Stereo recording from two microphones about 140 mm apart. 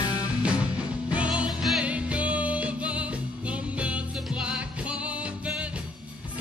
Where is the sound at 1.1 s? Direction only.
10° right (ahead or behind).